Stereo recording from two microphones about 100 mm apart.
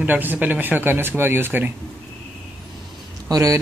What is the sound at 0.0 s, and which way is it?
Speech, 20° right (ahead or behind).